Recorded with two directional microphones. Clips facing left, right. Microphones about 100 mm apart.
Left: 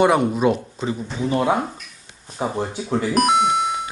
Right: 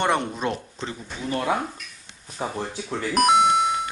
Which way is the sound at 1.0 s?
25° left (ahead or behind).